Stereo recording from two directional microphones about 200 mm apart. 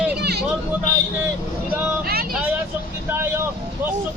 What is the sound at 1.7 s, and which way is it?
Speech, 10° right (ahead or behind).